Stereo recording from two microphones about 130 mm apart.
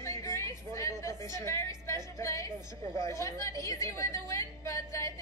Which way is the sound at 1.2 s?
25° left (ahead or behind).